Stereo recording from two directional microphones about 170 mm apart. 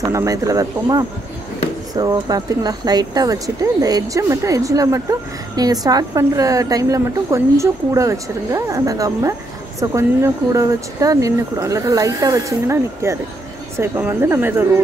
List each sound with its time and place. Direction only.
0.0 s a woman's voice: 20° right (ahead or behind)